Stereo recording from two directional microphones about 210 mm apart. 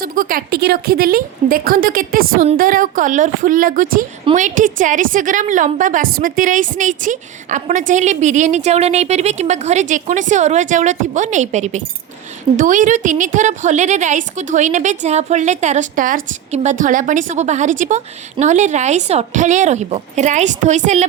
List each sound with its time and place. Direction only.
0.0 s a woman's voice: 40° right (ahead or behind)